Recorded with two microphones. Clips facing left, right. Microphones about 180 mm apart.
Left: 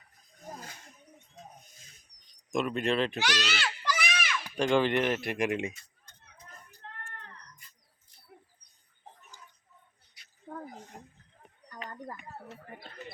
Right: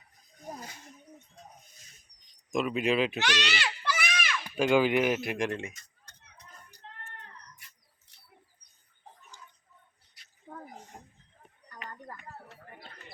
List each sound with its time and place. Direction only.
2.5 s speech: centre (ahead or behind)
3.2 s a child's voice: 10° left (ahead or behind)
6.1 s a sound: 75° right (ahead or behind)
7.6 s mouse: 80° right
8.1 s bird: 75° right (ahead or behind)